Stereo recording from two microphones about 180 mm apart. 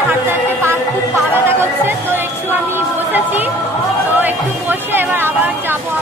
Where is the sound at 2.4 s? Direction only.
10° right (ahead or behind).